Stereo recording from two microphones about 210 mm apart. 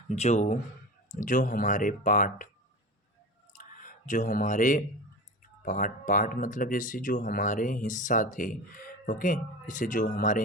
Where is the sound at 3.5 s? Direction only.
40° left (ahead or behind).